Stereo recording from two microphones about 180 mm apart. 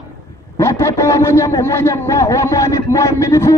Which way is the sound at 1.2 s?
15° left (ahead or behind).